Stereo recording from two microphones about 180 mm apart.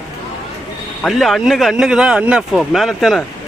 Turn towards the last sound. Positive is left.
turn(degrees=0)  # may be behind; listen again after turning